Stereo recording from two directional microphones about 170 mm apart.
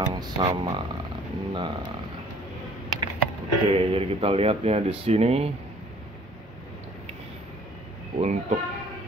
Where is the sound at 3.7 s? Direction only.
35° right (ahead or behind).